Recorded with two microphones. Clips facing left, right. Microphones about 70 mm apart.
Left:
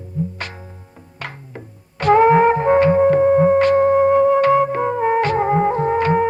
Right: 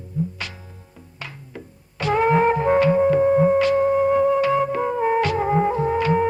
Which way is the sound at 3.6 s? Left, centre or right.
Left.